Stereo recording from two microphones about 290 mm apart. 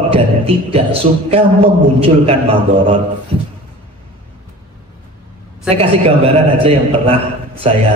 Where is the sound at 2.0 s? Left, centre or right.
Centre.